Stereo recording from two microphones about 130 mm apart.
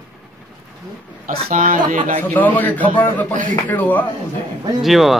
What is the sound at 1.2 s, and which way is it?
Speech, 90° right.